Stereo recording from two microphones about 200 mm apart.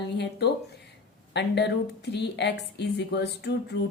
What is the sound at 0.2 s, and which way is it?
A woman's voice, 55° left (ahead or behind).